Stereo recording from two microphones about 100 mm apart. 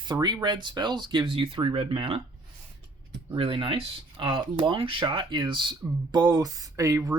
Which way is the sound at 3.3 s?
60° right (ahead or behind).